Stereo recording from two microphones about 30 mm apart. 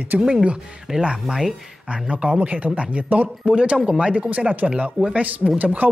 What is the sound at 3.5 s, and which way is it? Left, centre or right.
Speech, right.